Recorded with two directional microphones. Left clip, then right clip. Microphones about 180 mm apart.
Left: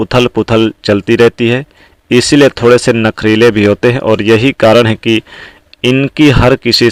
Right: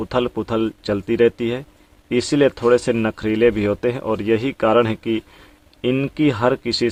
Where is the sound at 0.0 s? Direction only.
30° left (ahead or behind).